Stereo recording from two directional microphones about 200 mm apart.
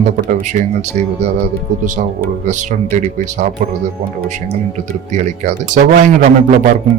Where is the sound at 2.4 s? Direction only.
35° right (ahead or behind).